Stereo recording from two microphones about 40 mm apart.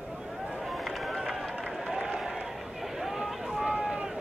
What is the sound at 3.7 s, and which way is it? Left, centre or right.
Run, centre.